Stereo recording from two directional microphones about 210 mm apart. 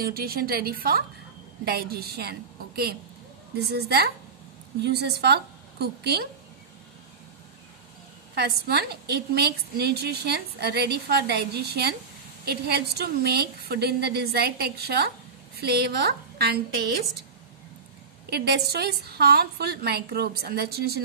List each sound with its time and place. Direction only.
0.0 s a woman's voice: 45° right (ahead or behind)
8.4 s a woman's voice: 50° right (ahead or behind)
18.3 s a woman's voice: 50° right (ahead or behind)